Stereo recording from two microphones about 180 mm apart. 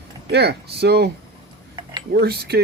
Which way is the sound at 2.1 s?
65° right (ahead or behind).